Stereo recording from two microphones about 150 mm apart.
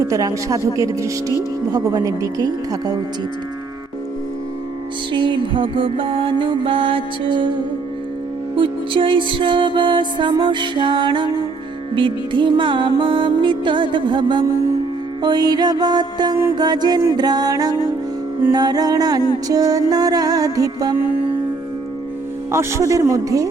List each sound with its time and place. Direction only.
0.1 s music: 20° right (ahead or behind)
5.1 s music: 35° right (ahead or behind)
8.5 s music: 35° right (ahead or behind)
22.5 s music: 20° right (ahead or behind)